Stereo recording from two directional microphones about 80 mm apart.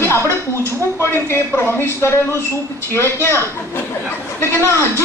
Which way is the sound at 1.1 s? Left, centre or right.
Left.